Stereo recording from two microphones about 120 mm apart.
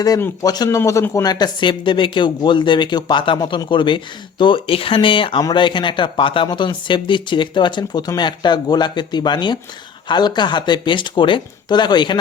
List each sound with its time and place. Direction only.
0.4 s speech: 30° left (ahead or behind)
0.8 s speech: 20° left (ahead or behind); by 12.2 s 40° left (ahead or behind)